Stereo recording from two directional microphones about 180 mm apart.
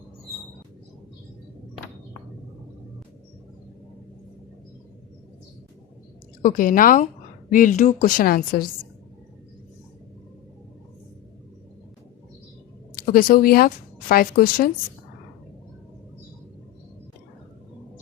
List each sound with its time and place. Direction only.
6.4 s a woman's voice: 50° left (ahead or behind)
13.0 s a woman's voice: 50° left (ahead or behind)